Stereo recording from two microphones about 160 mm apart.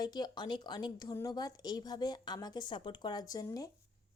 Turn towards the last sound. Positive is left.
turn(degrees=25)  # may be behind; listen again after turning